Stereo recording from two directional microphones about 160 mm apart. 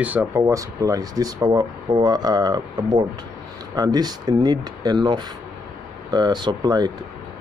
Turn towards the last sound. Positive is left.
turn(degrees=-25)  # may be behind; listen again after turning